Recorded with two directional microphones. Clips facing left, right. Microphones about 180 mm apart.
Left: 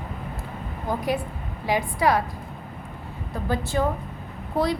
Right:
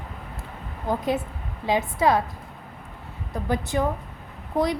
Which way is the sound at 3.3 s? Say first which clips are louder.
Even; 20° right (ahead or behind).